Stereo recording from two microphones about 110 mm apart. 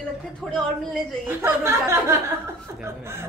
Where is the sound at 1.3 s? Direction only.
20° right (ahead or behind).